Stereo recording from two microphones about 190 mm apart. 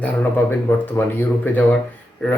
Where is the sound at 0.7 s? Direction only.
10° left (ahead or behind).